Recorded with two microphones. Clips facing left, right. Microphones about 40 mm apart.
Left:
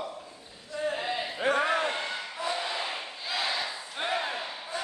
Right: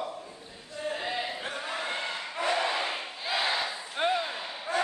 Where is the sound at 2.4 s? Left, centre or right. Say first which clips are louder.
Right 5 dB; right.